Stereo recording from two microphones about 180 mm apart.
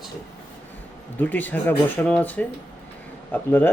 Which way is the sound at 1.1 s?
10° left (ahead or behind).